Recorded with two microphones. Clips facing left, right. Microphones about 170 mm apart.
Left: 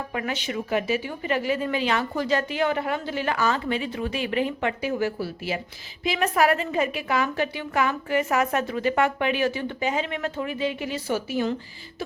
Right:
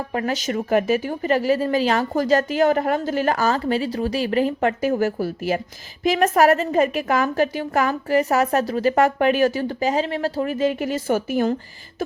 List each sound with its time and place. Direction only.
0.1 s a woman's voice: 40° right (ahead or behind)